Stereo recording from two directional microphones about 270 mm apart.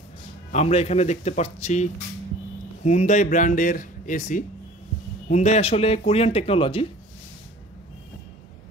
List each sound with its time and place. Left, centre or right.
0.5 s speech: left